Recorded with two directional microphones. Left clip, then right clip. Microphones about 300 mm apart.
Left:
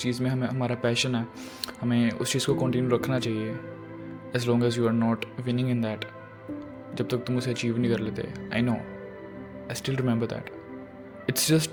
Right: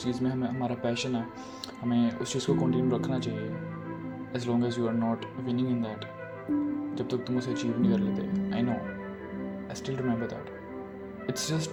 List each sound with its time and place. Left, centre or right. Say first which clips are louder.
0.0 s speech: left 2 dB; left
9.8 s speech: left 3 dB; left